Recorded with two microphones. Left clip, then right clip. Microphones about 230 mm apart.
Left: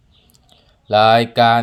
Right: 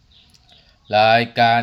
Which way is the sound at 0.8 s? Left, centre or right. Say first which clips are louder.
Left 2 dB; centre.